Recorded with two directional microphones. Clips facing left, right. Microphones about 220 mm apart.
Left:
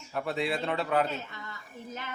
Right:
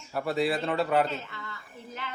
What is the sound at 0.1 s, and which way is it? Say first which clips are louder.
Speech: right 3 dB; centre (ahead or behind).